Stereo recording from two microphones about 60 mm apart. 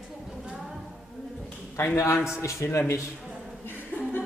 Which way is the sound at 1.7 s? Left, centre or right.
Left.